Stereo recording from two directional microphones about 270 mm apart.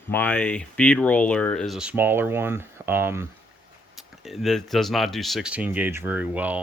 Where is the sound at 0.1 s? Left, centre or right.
Centre.